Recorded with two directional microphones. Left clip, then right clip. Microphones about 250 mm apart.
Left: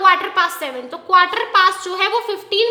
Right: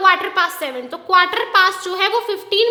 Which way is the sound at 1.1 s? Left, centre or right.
Centre.